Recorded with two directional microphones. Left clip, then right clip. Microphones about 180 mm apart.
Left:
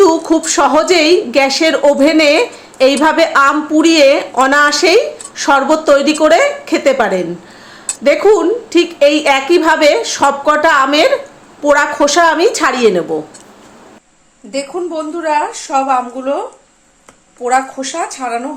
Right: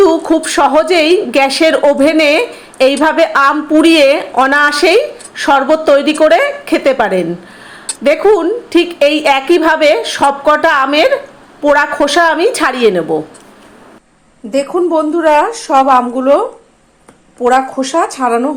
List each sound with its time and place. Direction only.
0.0 s a woman's voice: 10° right (ahead or behind)
14.5 s a woman's voice: 35° right (ahead or behind)
17.7 s a woman's voice: 35° right (ahead or behind)